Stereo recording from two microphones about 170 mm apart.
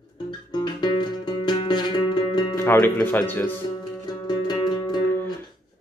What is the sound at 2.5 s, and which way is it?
Speech, 15° left (ahead or behind).